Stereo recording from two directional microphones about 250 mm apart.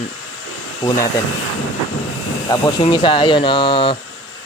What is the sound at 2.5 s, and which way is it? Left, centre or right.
Speech, centre.